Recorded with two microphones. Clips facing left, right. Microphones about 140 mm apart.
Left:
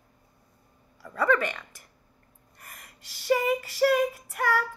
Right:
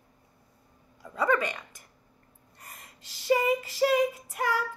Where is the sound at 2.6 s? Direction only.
20° right (ahead or behind).